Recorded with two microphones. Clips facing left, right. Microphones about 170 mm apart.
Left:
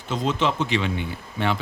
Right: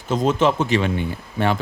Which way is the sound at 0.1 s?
45° right (ahead or behind).